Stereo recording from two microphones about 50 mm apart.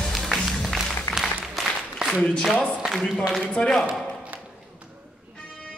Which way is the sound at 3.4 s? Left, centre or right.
Centre.